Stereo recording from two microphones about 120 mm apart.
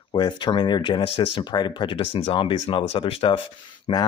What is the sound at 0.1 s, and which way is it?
Speech, 40° left (ahead or behind).